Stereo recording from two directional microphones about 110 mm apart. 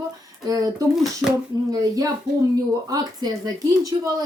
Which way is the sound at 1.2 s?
5° right (ahead or behind).